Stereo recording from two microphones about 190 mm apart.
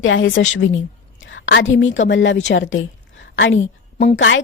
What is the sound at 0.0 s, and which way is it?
A woman's voice, 90° left.